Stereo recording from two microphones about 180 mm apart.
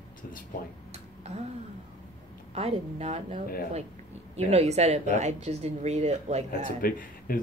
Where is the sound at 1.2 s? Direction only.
35° right (ahead or behind).